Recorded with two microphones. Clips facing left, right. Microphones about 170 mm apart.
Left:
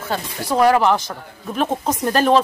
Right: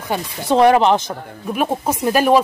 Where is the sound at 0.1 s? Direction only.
25° right (ahead or behind).